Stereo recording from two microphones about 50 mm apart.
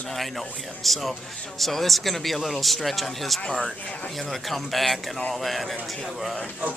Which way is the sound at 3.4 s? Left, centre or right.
Centre.